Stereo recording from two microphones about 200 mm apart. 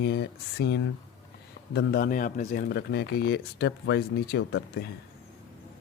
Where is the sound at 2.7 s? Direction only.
55° left (ahead or behind).